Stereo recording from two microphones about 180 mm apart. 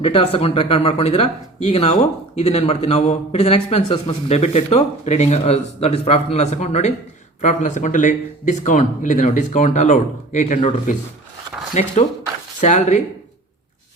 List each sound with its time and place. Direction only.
0.0 s speech: 30° left (ahead or behind)
11.7 s speech: 40° left (ahead or behind)